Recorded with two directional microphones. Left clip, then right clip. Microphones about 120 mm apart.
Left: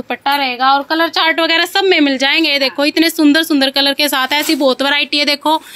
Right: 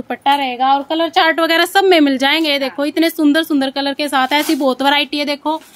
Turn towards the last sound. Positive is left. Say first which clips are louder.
# left 1 dB
turn(degrees=-20)  # may be behind; listen again after turning